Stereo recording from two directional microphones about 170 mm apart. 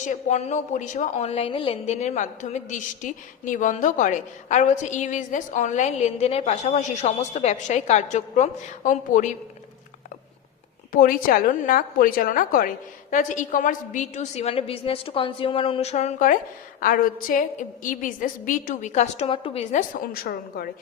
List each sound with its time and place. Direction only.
0.0 s a woman's voice: 45° left (ahead or behind)
10.9 s a woman's voice: 55° left (ahead or behind); by 19.6 s 35° left (ahead or behind)
19.7 s a woman's voice: 60° left (ahead or behind)